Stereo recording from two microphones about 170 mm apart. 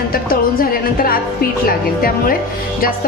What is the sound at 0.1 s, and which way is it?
A woman's voice, 60° left (ahead or behind).